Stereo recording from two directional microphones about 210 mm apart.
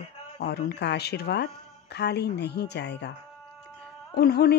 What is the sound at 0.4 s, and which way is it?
Speech, 50° left (ahead or behind).